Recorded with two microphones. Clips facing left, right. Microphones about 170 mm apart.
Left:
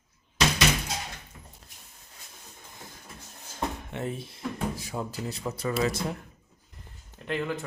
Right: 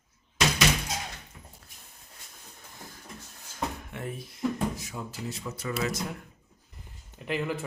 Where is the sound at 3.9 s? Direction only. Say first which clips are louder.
Left 4 dB; 25° left (ahead or behind).